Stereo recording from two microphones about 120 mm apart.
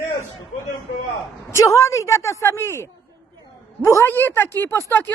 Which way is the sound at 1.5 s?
25° left (ahead or behind).